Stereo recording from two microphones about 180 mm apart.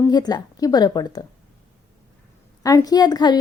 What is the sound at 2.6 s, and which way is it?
Speech, 20° left (ahead or behind).